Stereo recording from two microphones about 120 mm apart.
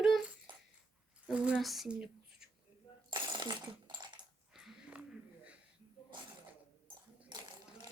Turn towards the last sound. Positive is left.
turn(degrees=-40)  # may be behind; listen again after turning